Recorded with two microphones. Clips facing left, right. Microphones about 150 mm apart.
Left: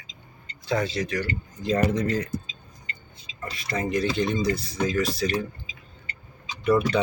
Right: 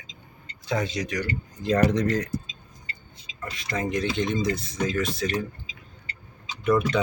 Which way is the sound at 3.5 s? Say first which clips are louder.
Left 1 dB; 35° left (ahead or behind).